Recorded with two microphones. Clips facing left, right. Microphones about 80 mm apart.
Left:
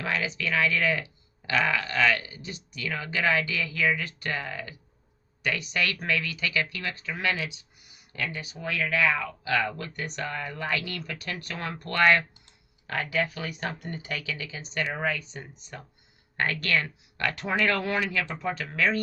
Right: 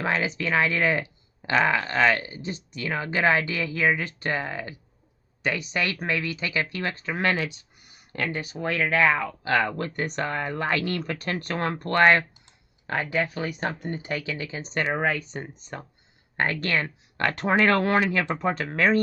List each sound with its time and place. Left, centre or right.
0.0 s speech: right
5.7 s speech: right
16.4 s speech: right